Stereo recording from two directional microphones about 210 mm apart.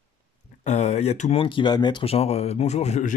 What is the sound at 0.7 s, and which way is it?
Speech, 30° left (ahead or behind).